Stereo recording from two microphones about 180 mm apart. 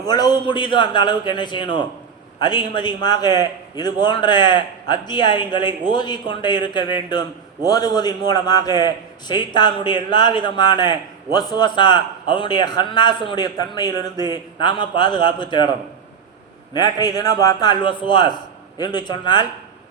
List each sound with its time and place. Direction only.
0.0 s a man's voice: 20° left (ahead or behind)
16.7 s a man's voice: 20° left (ahead or behind)